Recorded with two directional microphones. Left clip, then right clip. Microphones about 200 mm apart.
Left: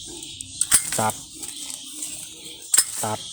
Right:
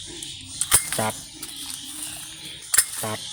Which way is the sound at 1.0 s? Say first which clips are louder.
Left 6 dB; centre (ahead or behind).